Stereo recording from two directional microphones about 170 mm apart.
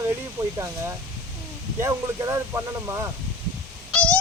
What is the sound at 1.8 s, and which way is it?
Speech, 15° right (ahead or behind).